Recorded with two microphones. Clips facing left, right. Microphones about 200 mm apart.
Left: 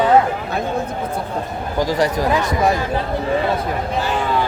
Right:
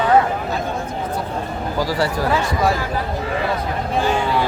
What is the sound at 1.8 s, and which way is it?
Speech, 20° left (ahead or behind).